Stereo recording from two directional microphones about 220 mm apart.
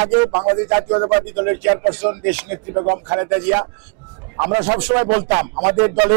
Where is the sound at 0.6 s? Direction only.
25° right (ahead or behind).